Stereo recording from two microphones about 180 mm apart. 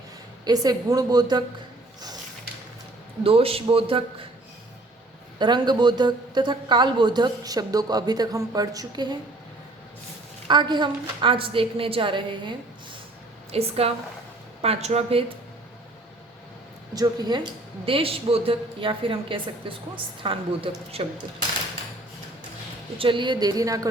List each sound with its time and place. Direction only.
0.4 s speech: 20° right (ahead or behind)
3.2 s a woman's voice: 30° right (ahead or behind)
5.4 s speech: 25° right (ahead or behind)
10.5 s a woman's voice: 25° right (ahead or behind)
16.9 s a woman's voice: 20° right (ahead or behind)
23.0 s speech: 30° right (ahead or behind)